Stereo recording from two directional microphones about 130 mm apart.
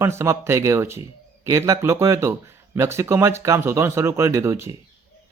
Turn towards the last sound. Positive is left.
turn(degrees=-20)  # may be behind; listen again after turning